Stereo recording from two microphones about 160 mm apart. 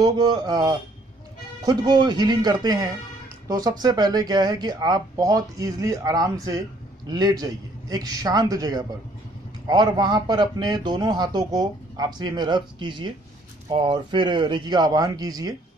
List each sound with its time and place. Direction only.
0.0 s a man's voice: 25° right (ahead or behind)